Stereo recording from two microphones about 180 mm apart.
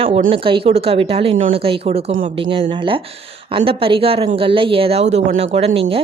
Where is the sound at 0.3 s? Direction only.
30° right (ahead or behind).